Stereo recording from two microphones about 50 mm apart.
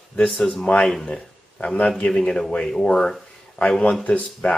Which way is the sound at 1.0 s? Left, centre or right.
Centre.